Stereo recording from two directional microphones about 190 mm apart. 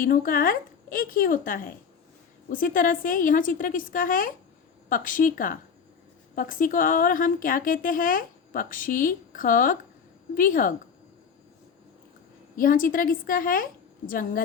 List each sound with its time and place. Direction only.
0.0 s a woman's voice: 45° left (ahead or behind)
12.5 s a woman's voice: 45° left (ahead or behind)